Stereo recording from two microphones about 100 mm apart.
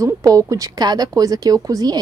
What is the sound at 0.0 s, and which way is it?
Speech, 35° right (ahead or behind).